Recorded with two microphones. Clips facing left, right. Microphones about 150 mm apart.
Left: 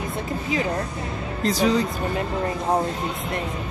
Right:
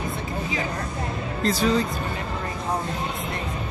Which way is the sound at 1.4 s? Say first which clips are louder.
Left 1 dB; 15° left (ahead or behind).